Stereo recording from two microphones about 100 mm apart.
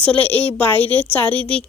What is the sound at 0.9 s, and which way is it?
Speech, 15° left (ahead or behind).